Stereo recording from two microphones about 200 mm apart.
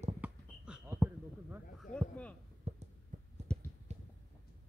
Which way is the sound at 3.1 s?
40° right (ahead or behind).